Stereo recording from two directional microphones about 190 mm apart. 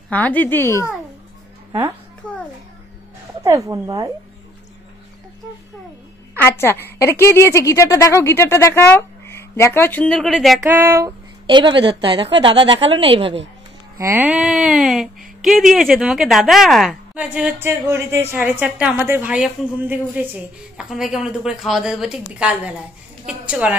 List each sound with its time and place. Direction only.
0.1 s a woman's voice: 10° left (ahead or behind)
2.2 s a sound: 5° left (ahead or behind)
3.4 s speech: 15° right (ahead or behind)
6.5 s a woman's voice: 10° left (ahead or behind); by 11.1 s 15° right (ahead or behind)
11.4 s a woman's voice: 25° right (ahead or behind)
13.9 s speech: 15° right (ahead or behind)